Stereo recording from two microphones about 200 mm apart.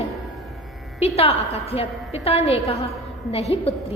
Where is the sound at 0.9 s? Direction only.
30° left (ahead or behind).